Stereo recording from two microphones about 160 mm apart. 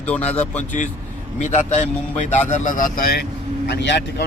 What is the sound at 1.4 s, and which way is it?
A man's voice, 45° left (ahead or behind).